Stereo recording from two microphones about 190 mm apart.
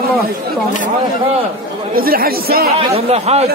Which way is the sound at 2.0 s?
50° right (ahead or behind).